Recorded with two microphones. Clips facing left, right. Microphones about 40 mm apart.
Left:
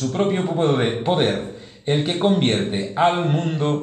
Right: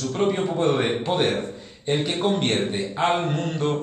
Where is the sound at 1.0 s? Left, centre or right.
Centre.